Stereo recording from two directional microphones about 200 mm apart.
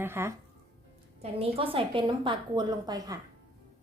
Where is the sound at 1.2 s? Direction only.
30° right (ahead or behind).